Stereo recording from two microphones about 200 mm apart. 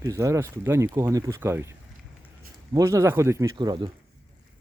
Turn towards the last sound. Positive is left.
turn(degrees=-20)  # may be behind; listen again after turning